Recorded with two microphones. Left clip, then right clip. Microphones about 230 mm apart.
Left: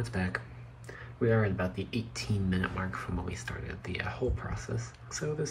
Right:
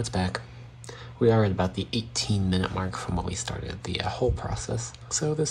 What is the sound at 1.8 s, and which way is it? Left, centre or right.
Speech, right.